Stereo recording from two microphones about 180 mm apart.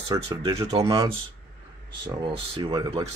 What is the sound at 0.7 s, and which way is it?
Speech, 35° right (ahead or behind).